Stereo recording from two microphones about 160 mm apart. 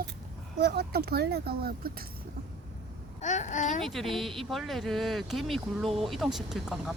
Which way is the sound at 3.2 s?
45° left (ahead or behind).